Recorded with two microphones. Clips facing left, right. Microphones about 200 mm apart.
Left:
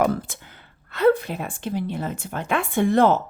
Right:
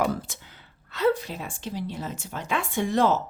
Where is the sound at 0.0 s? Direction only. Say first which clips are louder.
Left 4 dB; 55° left (ahead or behind).